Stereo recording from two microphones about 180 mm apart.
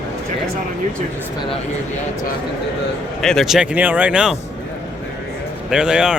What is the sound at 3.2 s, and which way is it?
Speech, centre (ahead or behind).